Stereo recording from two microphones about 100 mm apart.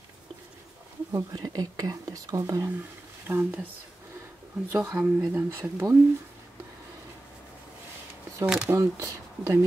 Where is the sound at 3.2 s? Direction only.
20° right (ahead or behind).